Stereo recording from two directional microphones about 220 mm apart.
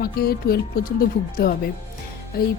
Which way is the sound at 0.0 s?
45° left (ahead or behind).